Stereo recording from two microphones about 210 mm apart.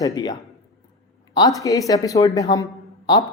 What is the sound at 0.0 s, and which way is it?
A woman's voice, 20° left (ahead or behind).